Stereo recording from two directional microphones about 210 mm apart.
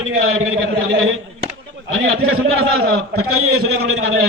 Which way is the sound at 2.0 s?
85° right.